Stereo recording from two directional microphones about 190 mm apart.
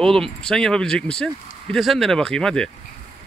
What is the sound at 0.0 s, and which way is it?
Speech, 5° left (ahead or behind).